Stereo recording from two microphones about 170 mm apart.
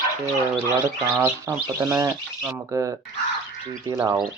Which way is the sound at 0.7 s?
15° right (ahead or behind).